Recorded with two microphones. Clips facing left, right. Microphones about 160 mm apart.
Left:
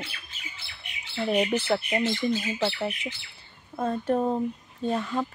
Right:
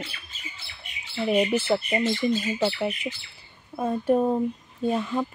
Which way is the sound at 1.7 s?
5° left (ahead or behind).